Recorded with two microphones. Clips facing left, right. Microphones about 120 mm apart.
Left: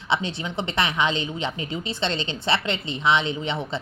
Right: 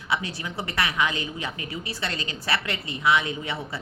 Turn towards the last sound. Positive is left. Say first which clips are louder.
# left 4 dB
turn(degrees=20)  # may be behind; listen again after turning